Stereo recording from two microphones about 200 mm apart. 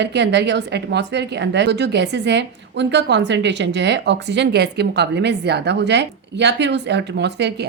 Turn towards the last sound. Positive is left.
turn(degrees=-55)  # may be behind; listen again after turning